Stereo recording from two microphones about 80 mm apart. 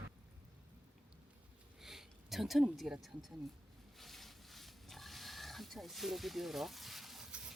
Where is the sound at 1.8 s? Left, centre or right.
Centre.